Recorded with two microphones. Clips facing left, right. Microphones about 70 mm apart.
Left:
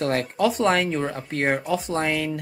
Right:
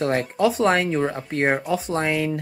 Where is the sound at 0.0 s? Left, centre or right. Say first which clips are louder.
Right 2 dB; centre.